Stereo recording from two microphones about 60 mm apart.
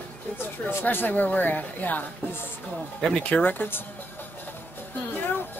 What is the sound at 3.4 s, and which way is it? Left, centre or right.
Speech, left.